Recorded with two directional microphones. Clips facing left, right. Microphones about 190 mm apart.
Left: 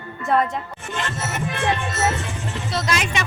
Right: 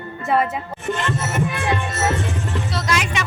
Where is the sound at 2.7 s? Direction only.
25° left (ahead or behind).